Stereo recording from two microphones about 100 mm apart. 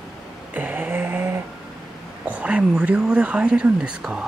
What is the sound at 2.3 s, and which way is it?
Speech, 10° right (ahead or behind).